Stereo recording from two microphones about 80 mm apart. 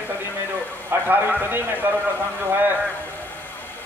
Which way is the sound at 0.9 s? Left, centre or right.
Right.